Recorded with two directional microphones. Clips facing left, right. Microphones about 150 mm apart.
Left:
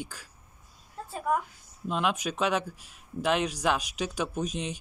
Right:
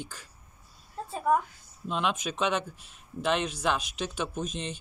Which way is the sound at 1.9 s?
5° left (ahead or behind).